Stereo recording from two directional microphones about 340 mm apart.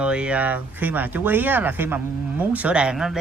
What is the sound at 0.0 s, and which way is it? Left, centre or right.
Speech, centre.